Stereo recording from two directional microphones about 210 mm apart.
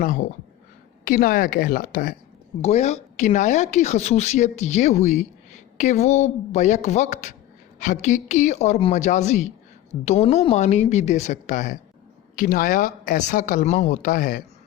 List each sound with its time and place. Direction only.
0.0 s speech: 40° left (ahead or behind)